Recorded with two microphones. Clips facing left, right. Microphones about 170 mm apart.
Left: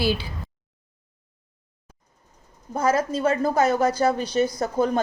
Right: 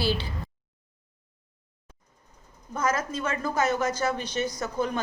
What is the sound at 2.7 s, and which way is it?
Speech, 30° left (ahead or behind).